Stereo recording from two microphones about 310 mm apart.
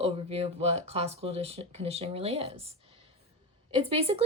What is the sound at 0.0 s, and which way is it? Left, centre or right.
Speech, centre.